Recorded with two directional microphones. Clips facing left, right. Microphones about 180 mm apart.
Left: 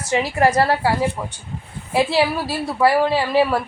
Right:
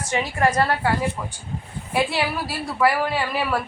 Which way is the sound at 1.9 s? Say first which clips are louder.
Left 5 dB; 25° left (ahead or behind).